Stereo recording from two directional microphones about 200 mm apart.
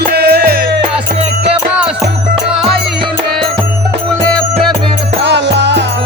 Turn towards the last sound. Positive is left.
turn(degrees=-60)  # may be behind; listen again after turning